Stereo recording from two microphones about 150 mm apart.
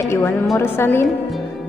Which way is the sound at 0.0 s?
15° left (ahead or behind).